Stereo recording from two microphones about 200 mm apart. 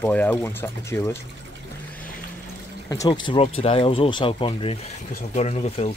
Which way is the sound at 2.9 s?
20° left (ahead or behind).